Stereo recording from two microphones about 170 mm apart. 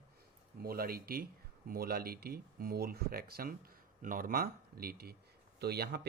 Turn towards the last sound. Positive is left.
turn(degrees=-70)  # may be behind; listen again after turning